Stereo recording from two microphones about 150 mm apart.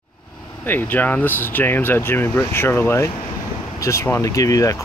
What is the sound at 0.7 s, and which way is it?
Speech, 10° left (ahead or behind).